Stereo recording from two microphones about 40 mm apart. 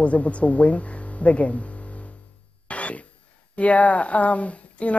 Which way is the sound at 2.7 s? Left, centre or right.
Left.